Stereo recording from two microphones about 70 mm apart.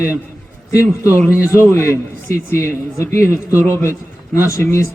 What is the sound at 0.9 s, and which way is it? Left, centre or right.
A man's voice, left.